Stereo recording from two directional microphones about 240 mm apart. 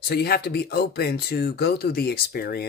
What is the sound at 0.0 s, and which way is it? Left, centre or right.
Speech, left.